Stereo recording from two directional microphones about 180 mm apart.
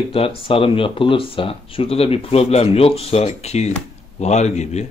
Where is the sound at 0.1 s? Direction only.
30° left (ahead or behind).